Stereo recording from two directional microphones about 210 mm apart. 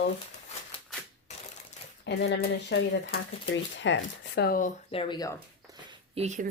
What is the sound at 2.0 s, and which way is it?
Speech, 55° left (ahead or behind).